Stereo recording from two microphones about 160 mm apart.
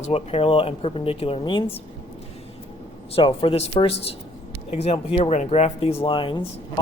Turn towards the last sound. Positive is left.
turn(degrees=35)  # may be behind; listen again after turning